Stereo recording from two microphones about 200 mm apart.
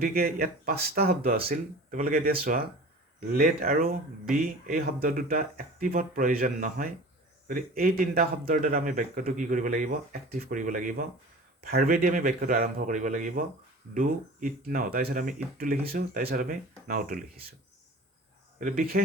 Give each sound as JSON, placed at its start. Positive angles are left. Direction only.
{"t": 0.0, "sound": "speech", "side_deg": -50}
{"t": 18.6, "sound": "speech", "side_deg": -45}